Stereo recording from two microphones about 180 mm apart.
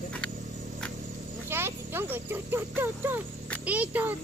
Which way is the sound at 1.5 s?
10° right (ahead or behind).